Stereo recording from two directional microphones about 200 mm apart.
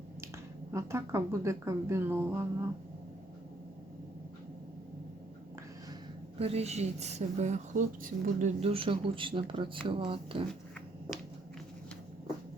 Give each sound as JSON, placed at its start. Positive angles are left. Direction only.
{"t": 0.7, "sound": "speech", "side_deg": -15}
{"t": 6.4, "sound": "a woman's voice", "side_deg": -30}